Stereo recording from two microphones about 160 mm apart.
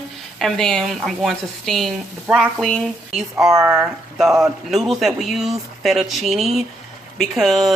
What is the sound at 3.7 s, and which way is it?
Speech, centre (ahead or behind).